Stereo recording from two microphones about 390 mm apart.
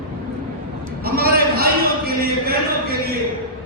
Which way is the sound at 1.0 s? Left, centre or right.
Right.